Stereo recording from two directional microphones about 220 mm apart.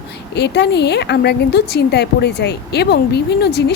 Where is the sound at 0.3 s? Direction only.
50° left (ahead or behind).